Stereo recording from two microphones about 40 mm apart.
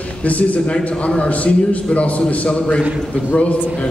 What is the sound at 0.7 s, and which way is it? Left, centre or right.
A man's voice, left.